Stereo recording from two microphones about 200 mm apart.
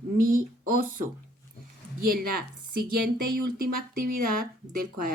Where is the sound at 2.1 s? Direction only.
50° right (ahead or behind).